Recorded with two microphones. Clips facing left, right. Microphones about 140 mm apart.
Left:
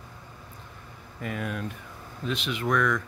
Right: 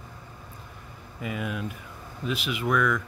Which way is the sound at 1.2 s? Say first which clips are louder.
Right 1 dB; 5° right (ahead or behind).